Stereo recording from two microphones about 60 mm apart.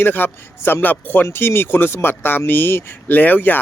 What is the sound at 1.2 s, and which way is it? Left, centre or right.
Speech, left.